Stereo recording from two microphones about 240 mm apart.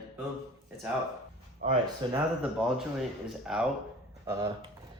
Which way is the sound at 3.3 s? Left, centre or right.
Centre.